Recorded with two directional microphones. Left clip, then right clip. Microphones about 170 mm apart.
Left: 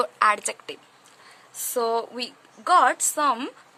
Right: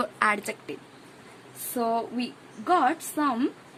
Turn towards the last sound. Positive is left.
turn(degrees=40)  # may be behind; listen again after turning